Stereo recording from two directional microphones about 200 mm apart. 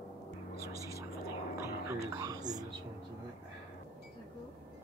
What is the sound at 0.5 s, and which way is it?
Music, 50° left (ahead or behind).